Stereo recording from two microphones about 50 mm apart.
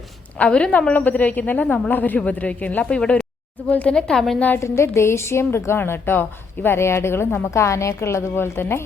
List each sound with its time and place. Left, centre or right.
0.3 s a woman's voice: left
0.9 s speech: left
3.0 s speech: centre
3.7 s a woman's voice: left
3.9 s speech: centre
4.4 s speech: left
4.6 s a woman's voice: left
7.5 s a woman's voice: left